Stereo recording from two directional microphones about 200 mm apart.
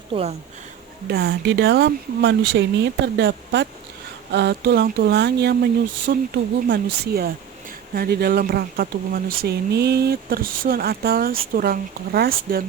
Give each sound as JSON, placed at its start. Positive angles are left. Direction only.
{"t": 0.1, "sound": "speech", "side_deg": -30}
{"t": 1.0, "sound": "speech", "side_deg": -50}
{"t": 1.3, "sound": "speech", "side_deg": -70}